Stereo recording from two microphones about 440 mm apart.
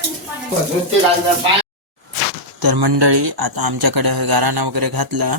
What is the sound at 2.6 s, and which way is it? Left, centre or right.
Speech, right.